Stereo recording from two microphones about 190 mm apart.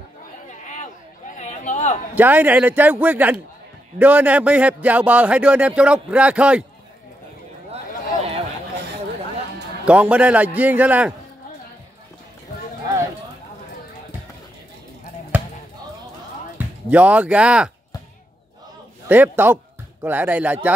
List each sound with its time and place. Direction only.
0.7 s a sound: 40° left (ahead or behind)
2.1 s a man's voice: 10° right (ahead or behind)
9.8 s a man's voice: 5° right (ahead or behind)
15.3 s basketball bounce: 10° right (ahead or behind)
16.5 s speech: 10° right (ahead or behind)
19.0 s speech: 10° right (ahead or behind)